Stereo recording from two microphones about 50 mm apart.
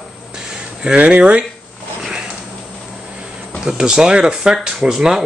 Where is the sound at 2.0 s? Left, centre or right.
Centre.